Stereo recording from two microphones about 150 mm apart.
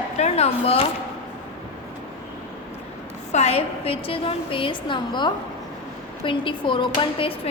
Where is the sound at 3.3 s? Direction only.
45° left (ahead or behind).